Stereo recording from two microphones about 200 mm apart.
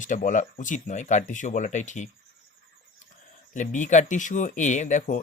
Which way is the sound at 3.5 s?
40° left (ahead or behind).